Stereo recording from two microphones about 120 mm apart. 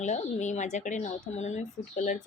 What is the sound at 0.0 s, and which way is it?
Speech, 80° left.